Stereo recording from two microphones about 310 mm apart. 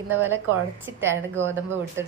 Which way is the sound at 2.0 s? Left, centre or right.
Right.